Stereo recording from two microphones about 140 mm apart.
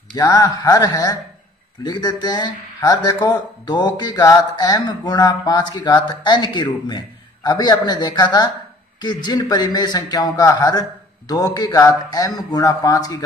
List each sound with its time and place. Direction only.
0.1 s a man's voice: 30° left (ahead or behind)